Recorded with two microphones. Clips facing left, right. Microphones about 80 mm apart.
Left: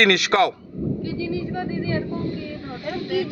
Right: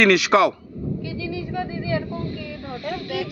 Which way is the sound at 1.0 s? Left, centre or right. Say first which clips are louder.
Left 3 dB; left.